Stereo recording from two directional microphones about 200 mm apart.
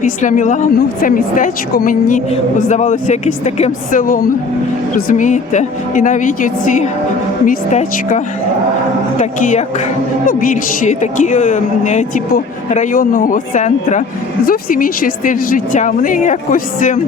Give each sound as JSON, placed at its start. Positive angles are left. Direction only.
{"t": 0.0, "sound": "a woman's voice", "side_deg": 40}